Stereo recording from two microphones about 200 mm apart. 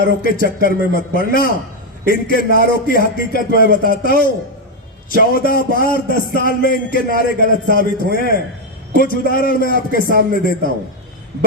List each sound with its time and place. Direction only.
0.0 s a man's voice: 45° left (ahead or behind)